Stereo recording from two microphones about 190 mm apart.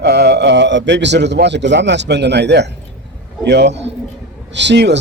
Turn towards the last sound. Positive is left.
turn(degrees=-65)  # may be behind; listen again after turning